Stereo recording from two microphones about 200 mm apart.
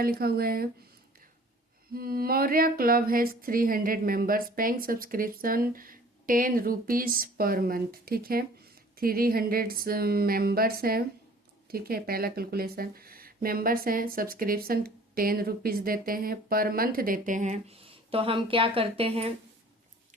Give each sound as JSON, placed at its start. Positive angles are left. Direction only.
{"t": 0.0, "sound": "speech", "side_deg": -50}
{"t": 1.9, "sound": "speech", "side_deg": -50}